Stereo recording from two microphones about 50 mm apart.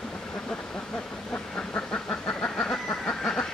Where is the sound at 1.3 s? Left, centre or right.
Left.